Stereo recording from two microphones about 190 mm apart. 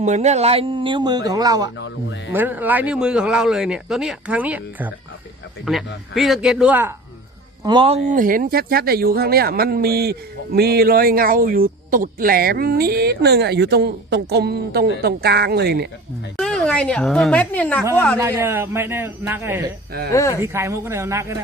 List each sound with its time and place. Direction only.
0.0 s speech: 35° right (ahead or behind); by 1.7 s 20° right (ahead or behind)
1.8 s speech: 70° left (ahead or behind)
2.3 s speech: 10° right (ahead or behind)
7.6 s speech: 25° right (ahead or behind)
8.1 s speech: 45° right (ahead or behind)
16.4 s speech: 5° left (ahead or behind)
18.2 s a man's voice: 15° right (ahead or behind)
20.1 s speech: 15° left (ahead or behind)
20.4 s a man's voice: 15° right (ahead or behind)